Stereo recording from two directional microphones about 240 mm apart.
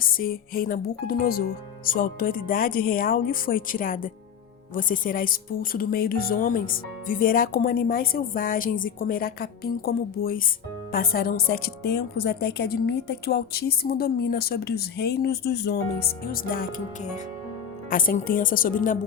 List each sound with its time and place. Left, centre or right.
0.0 s a woman's voice: left